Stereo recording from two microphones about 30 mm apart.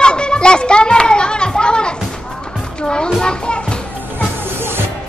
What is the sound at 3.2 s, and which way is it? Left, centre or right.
Children playing, left.